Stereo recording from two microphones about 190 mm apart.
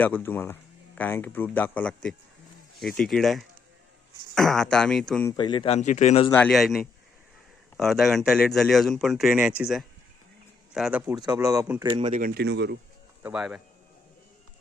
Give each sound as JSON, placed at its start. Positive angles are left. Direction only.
{"t": 0.0, "sound": "speech", "side_deg": 10}
{"t": 5.2, "sound": "speech", "side_deg": 25}
{"t": 6.3, "sound": "speech", "side_deg": 5}
{"t": 11.8, "sound": "speech", "side_deg": -25}
{"t": 12.1, "sound": "speech", "side_deg": -50}
{"t": 13.2, "sound": "a man's voice", "side_deg": -5}